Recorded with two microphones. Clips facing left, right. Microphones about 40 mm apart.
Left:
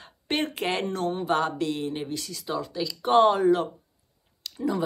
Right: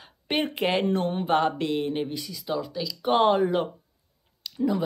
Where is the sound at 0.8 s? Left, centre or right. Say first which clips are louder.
Right 2 dB; right.